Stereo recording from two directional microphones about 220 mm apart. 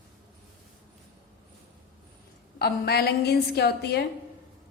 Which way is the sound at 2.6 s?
45° left (ahead or behind).